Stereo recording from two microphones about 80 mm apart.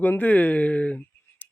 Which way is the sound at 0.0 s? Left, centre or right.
Left.